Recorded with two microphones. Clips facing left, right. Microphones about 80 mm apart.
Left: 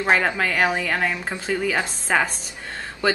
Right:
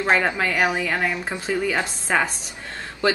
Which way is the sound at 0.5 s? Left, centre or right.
Centre.